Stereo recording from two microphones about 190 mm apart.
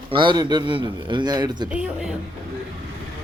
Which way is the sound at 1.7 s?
5° right (ahead or behind).